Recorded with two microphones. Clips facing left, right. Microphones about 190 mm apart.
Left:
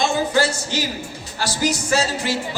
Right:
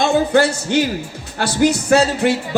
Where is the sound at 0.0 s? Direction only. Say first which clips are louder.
Right 5 dB; 60° right (ahead or behind).